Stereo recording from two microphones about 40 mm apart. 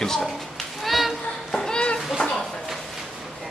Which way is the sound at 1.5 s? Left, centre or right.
Centre.